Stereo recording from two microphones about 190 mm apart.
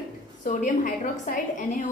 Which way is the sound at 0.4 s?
45° left (ahead or behind).